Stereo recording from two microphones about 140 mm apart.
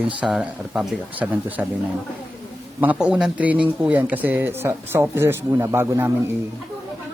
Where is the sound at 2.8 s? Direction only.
10° right (ahead or behind).